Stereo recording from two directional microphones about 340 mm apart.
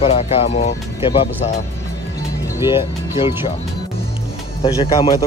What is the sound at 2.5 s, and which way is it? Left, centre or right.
Speech, centre.